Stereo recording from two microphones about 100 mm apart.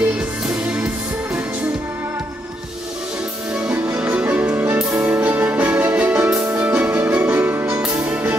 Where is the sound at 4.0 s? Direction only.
15° right (ahead or behind).